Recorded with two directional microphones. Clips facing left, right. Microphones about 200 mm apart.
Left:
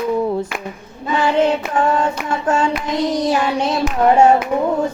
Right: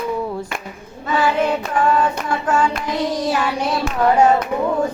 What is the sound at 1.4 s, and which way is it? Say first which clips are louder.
Clapping: left 3 dB; 25° left (ahead or behind).